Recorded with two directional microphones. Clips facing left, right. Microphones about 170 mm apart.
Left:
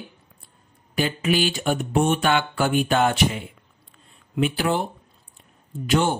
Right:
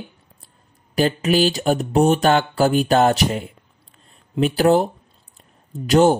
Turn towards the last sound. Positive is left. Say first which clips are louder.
# right 7 dB
turn(degrees=-40)  # may be behind; listen again after turning